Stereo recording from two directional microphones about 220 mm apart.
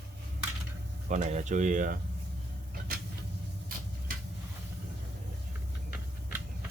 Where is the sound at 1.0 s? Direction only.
35° right (ahead or behind).